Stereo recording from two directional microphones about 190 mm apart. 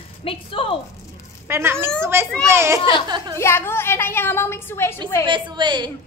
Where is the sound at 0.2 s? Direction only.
30° left (ahead or behind).